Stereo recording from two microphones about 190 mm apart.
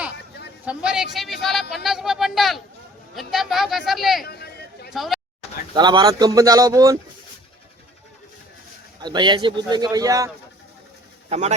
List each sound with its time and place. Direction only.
0.6 s speech: 5° right (ahead or behind)
4.2 s chatter: 55° left (ahead or behind)
4.9 s speech: centre (ahead or behind)
5.7 s a man's voice: 20° right (ahead or behind)
9.0 s a man's voice: 25° right (ahead or behind)
11.3 s speech: 35° right (ahead or behind)